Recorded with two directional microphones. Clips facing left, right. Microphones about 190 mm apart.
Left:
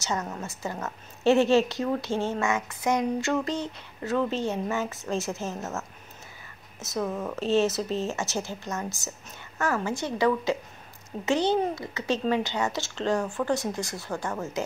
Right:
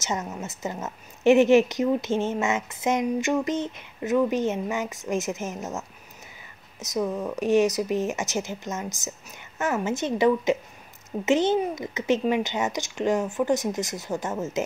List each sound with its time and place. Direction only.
0.0 s a woman's voice: 20° right (ahead or behind)